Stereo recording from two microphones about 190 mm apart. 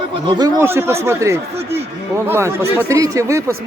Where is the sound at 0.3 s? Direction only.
20° right (ahead or behind).